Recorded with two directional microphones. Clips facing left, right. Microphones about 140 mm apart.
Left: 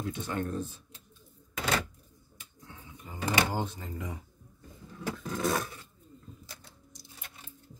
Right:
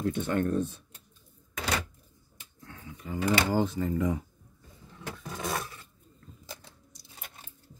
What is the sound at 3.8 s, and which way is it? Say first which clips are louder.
Speech: right 11 dB; 90° right.